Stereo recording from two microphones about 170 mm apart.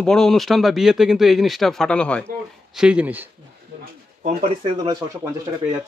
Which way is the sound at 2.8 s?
5° right (ahead or behind).